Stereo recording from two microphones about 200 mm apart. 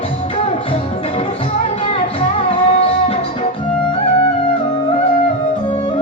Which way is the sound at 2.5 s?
30° left (ahead or behind).